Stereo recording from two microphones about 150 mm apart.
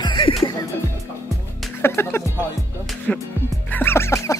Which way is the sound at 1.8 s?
15° left (ahead or behind).